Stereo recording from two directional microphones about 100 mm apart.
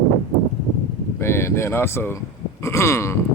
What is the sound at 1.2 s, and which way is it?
Speech, 25° left (ahead or behind).